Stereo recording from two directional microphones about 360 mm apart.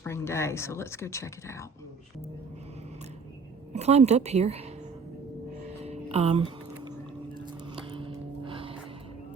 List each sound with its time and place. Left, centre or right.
0.0 s speech: centre
3.7 s a woman's voice: centre
5.6 s music: centre